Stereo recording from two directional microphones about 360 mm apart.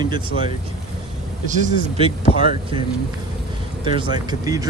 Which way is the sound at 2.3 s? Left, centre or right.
Centre.